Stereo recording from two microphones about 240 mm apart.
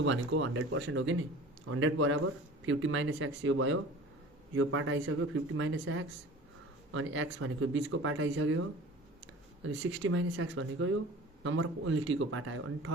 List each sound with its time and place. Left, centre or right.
0.0 s speech: right
9.6 s speech: right